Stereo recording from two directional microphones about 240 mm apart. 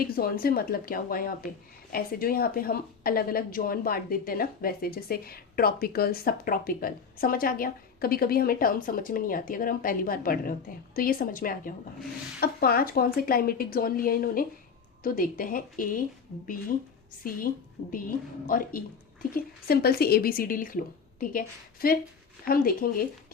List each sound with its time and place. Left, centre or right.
0.0 s a woman's voice: left
18.4 s a woman's voice: left